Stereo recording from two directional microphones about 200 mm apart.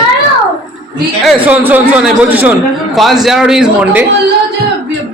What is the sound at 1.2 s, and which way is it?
A man's voice, 10° right (ahead or behind).